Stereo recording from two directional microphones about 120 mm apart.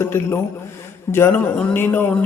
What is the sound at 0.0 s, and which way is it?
A man's voice, 20° left (ahead or behind).